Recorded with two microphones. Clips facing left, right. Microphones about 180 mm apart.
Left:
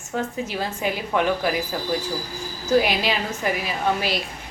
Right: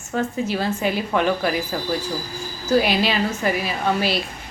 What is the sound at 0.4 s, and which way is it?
A woman's voice, 15° left (ahead or behind).